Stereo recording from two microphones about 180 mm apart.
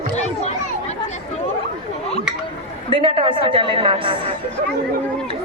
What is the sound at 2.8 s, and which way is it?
A woman's voice, 30° right (ahead or behind).